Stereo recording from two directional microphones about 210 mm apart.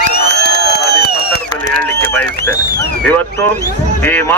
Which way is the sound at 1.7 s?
5° left (ahead or behind).